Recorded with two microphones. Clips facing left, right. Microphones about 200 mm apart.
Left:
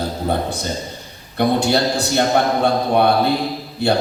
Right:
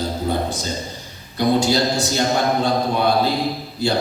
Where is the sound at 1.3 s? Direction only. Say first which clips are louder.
Left 1 dB; 60° left (ahead or behind).